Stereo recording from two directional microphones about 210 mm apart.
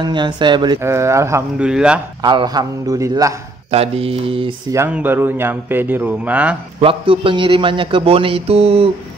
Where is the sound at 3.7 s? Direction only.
30° right (ahead or behind).